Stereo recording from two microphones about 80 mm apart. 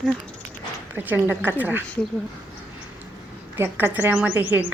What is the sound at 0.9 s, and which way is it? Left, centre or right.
Speech, right.